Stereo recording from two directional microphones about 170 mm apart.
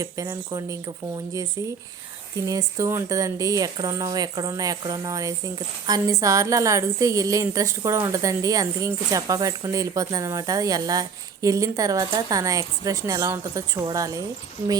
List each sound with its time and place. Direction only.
0.0 s speech: 20° right (ahead or behind)
2.5 s speech: 20° right (ahead or behind)